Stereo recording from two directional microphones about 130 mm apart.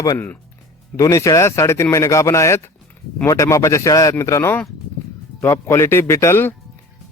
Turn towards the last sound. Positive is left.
turn(degrees=15)  # may be behind; listen again after turning